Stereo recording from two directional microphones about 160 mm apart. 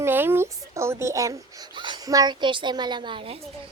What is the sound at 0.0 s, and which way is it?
A child's voice, 15° right (ahead or behind).